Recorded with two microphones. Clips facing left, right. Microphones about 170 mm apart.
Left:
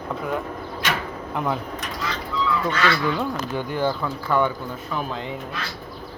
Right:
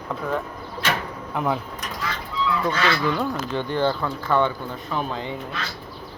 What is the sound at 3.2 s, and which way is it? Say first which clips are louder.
Speech: right 1 dB; 10° left (ahead or behind).